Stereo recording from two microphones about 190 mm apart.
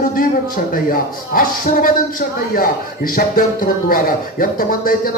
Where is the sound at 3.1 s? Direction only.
50° left (ahead or behind).